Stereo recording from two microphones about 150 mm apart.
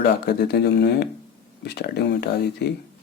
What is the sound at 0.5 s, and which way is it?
Speech, 90° left.